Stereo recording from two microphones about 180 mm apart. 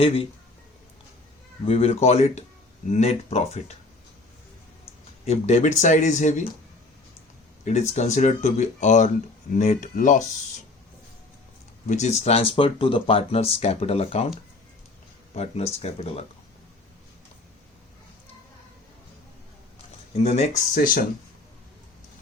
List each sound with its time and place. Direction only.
0.0 s speech: 35° left (ahead or behind)
1.6 s speech: 35° left (ahead or behind)
5.2 s speech: 35° left (ahead or behind)
7.6 s speech: 40° left (ahead or behind)
11.9 s speech: 40° left (ahead or behind)
15.4 s speech: 35° left (ahead or behind)
20.2 s speech: 40° left (ahead or behind)